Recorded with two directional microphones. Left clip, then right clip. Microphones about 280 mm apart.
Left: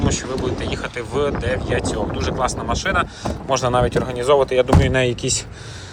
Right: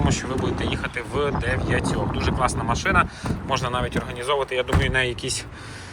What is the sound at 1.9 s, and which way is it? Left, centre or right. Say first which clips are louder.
Speech: left 2 dB; left.